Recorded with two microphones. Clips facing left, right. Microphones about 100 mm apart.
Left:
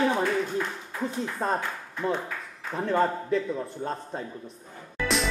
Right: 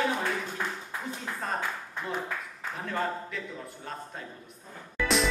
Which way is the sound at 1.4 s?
35° left (ahead or behind).